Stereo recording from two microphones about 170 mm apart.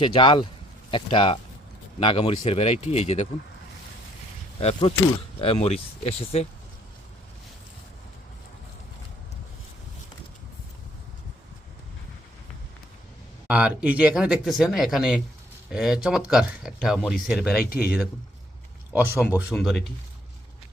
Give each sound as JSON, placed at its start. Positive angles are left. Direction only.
{"t": 0.0, "sound": "speech", "side_deg": 30}
{"t": 4.6, "sound": "speech", "side_deg": 35}
{"t": 13.5, "sound": "speech", "side_deg": -5}
{"t": 18.9, "sound": "speech", "side_deg": -10}
{"t": 19.5, "sound": "speech", "side_deg": 0}